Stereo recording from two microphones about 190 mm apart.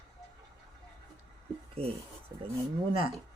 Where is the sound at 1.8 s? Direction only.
30° right (ahead or behind).